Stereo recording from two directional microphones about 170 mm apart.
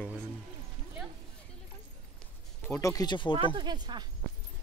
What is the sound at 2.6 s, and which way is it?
Speech, 15° left (ahead or behind).